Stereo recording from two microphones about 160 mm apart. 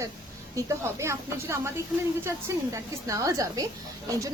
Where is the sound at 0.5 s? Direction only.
20° right (ahead or behind).